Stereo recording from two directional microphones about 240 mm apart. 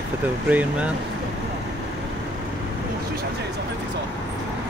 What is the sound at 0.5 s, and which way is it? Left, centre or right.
Speech, centre.